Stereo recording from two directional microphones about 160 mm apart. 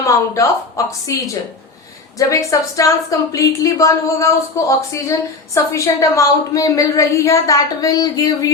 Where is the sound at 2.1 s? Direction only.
20° left (ahead or behind).